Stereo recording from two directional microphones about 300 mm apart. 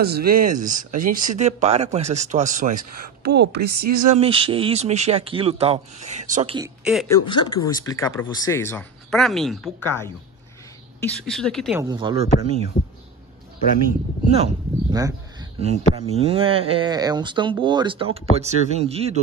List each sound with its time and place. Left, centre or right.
0.0 s a woman's voice: right
3.8 s speech: right
4.1 s speech: centre
6.8 s speech: centre
7.2 s speech: centre
11.2 s speech: centre
11.8 s speech: centre
14.3 s speech: centre